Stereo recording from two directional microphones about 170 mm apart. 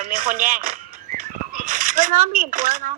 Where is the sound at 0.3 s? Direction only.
55° right (ahead or behind).